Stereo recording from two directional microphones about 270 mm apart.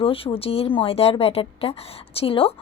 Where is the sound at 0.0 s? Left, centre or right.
Centre.